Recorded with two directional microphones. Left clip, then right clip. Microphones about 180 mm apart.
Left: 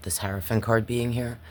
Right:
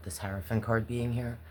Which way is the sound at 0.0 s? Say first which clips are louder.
Left 7 dB; 65° left (ahead or behind).